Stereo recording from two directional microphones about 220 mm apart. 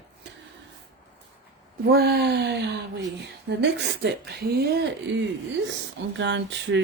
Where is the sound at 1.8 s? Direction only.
45° right (ahead or behind).